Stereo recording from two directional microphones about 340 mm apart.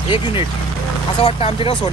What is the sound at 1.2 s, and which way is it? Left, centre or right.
Speech, centre.